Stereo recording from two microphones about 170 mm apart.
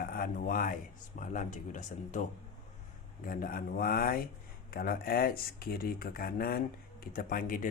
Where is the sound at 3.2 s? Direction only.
55° left (ahead or behind).